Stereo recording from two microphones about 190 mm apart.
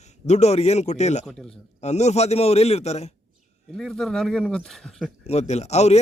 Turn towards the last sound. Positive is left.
turn(degrees=35)  # may be behind; listen again after turning